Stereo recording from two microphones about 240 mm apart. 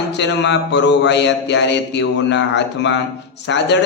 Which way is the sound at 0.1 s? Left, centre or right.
Left.